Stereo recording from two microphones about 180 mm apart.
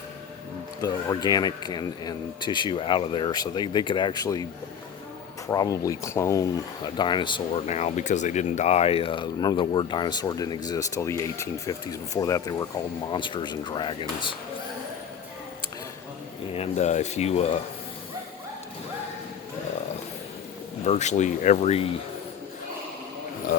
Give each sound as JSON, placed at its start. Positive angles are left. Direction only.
{"t": 0.8, "sound": "speech", "side_deg": 20}
{"t": 5.5, "sound": "speech", "side_deg": 20}
{"t": 7.7, "sound": "speech", "side_deg": 40}
{"t": 16.5, "sound": "speech", "side_deg": 35}
{"t": 20.8, "sound": "speech", "side_deg": 40}